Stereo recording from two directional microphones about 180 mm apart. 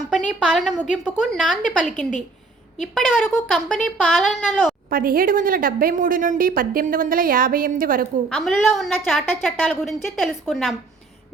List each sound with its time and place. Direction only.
0.1 s a woman's voice: 5° right (ahead or behind)
4.9 s a woman's voice: 50° right (ahead or behind)
8.4 s a woman's voice: centre (ahead or behind)